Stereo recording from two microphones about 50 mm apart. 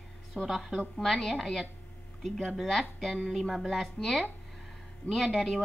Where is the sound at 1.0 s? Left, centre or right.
Centre.